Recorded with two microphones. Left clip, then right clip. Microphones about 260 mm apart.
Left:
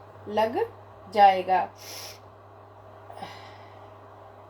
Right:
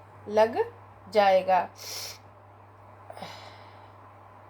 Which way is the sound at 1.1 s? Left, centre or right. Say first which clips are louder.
Left 2 dB; right.